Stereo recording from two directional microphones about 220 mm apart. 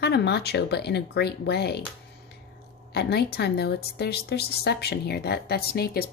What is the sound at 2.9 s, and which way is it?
Speech, 45° left (ahead or behind).